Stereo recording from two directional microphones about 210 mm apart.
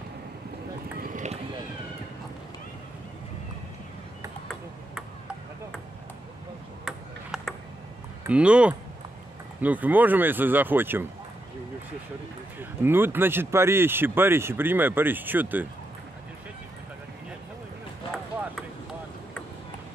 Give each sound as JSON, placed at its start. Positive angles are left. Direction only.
{"t": 0.9, "sound": "a sound", "side_deg": -40}
{"t": 6.8, "sound": "ping", "side_deg": 0}
{"t": 8.3, "sound": "speech", "side_deg": -5}
{"t": 12.5, "sound": "speech", "side_deg": -10}